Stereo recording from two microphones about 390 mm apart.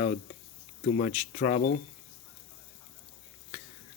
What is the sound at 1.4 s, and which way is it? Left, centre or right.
Speech, left.